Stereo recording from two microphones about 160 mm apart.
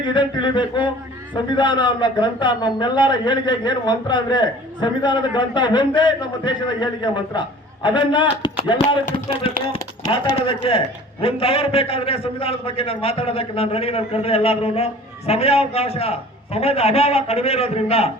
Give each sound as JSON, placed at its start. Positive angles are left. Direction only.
{"t": 0.0, "sound": "speech", "side_deg": 30}
{"t": 10.1, "sound": "a man's voice", "side_deg": 35}